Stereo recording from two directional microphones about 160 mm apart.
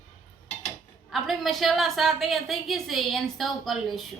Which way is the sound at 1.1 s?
Centre (ahead or behind).